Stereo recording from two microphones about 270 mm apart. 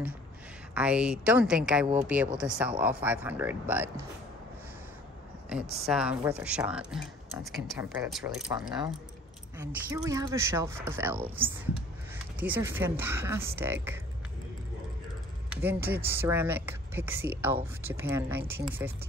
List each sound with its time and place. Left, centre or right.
0.7 s speech: centre
5.9 s speech: centre
8.5 s speech: centre
15.5 s speech: centre